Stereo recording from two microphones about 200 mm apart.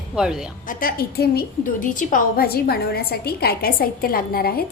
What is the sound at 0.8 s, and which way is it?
A woman's voice, 50° left (ahead or behind).